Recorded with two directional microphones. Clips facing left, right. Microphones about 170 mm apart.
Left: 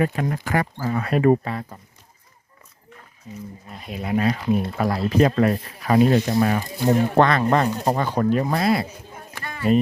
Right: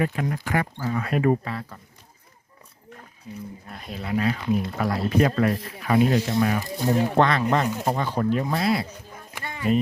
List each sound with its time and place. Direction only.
0.0 s speech: 45° left (ahead or behind)
1.5 s speech: 20° left (ahead or behind)
3.7 s speech: 5° left (ahead or behind)
4.1 s speech: 30° left (ahead or behind); by 8.9 s 50° left (ahead or behind)
9.3 s a sound: 20° right (ahead or behind)